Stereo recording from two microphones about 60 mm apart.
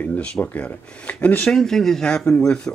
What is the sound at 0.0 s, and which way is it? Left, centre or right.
Speech, left.